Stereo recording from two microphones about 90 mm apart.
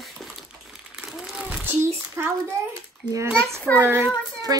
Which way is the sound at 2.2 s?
25° right (ahead or behind).